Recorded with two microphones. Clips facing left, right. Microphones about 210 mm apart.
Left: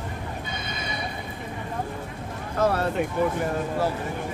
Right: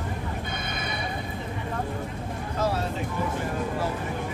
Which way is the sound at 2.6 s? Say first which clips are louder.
Left 5 dB; 60° left (ahead or behind).